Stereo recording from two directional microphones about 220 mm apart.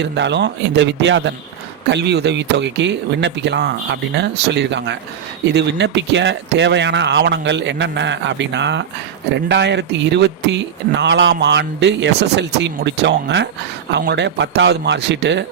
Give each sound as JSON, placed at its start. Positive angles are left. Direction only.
{"t": 0.0, "sound": "speech", "side_deg": -50}